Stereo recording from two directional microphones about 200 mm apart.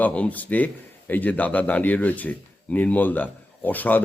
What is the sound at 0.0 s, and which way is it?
A man's voice, 5° left (ahead or behind).